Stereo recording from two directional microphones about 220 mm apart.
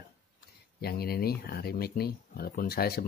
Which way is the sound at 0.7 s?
45° left (ahead or behind).